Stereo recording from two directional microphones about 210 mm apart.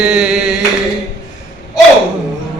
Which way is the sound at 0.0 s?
5° right (ahead or behind).